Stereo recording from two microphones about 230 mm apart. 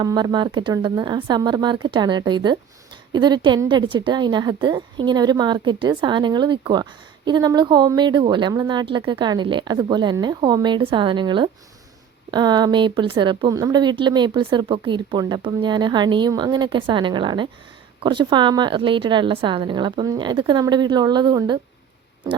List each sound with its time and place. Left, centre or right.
0.0 s a woman's voice: centre